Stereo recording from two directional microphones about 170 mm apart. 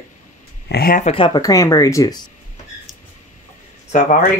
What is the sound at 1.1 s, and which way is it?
Speech, 30° left (ahead or behind).